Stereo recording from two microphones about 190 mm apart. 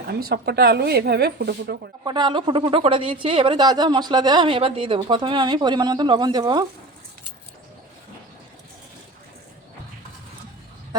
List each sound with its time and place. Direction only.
0.1 s a woman's voice: 55° right (ahead or behind)
2.0 s speech: 25° right (ahead or behind)